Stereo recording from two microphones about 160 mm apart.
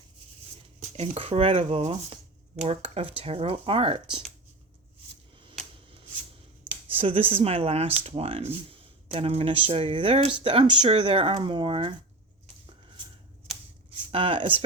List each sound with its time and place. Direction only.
0.8 s speech: 40° right (ahead or behind)
6.8 s speech: 35° right (ahead or behind)
14.1 s speech: 35° right (ahead or behind)